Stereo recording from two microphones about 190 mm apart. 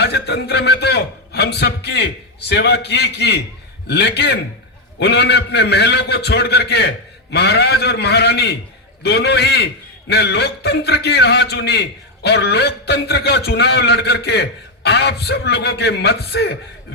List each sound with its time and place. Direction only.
0.0 s a man's voice: 60° left (ahead or behind)